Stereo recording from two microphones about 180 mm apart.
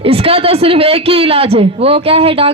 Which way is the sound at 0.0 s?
30° right (ahead or behind).